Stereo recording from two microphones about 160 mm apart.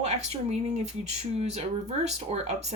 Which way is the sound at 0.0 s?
45° right (ahead or behind).